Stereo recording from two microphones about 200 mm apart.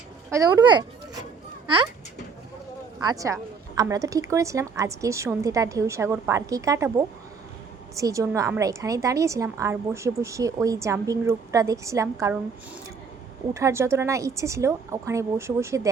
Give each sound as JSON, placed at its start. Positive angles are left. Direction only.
{"t": 0.3, "sound": "a child's voice", "side_deg": -15}
{"t": 3.0, "sound": "a woman's voice", "side_deg": -20}
{"t": 7.9, "sound": "a woman's voice", "side_deg": -15}
{"t": 13.5, "sound": "a woman's voice", "side_deg": -15}